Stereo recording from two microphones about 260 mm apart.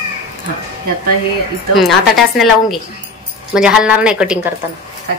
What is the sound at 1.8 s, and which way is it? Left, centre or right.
Speech, centre.